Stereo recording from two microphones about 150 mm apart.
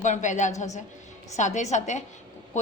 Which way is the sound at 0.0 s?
55° left (ahead or behind).